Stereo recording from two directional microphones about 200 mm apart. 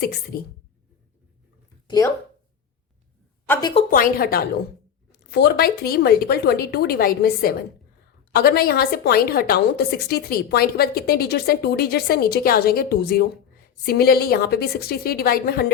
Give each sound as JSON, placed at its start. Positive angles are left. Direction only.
{"t": 0.3, "sound": "a woman's voice", "side_deg": 50}
{"t": 3.8, "sound": "a woman's voice", "side_deg": 45}